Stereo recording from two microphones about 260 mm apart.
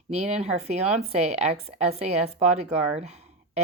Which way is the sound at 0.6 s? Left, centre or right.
Right.